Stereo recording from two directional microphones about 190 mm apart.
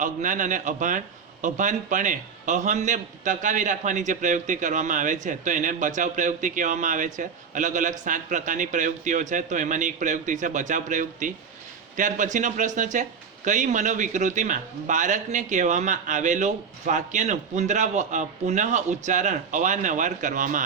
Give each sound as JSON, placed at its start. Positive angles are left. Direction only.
{"t": 0.0, "sound": "a man's voice", "side_deg": -40}